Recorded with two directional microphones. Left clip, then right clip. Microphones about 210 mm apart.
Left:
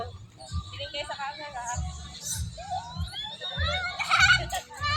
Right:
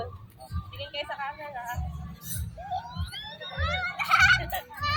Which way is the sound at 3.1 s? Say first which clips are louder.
Left 4 dB; 5° right (ahead or behind).